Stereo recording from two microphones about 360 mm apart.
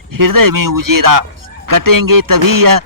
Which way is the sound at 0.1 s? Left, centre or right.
Right.